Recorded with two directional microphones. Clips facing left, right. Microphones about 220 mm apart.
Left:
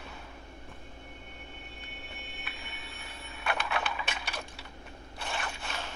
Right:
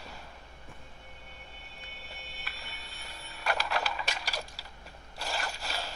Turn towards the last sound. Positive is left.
turn(degrees=-35)  # may be behind; listen again after turning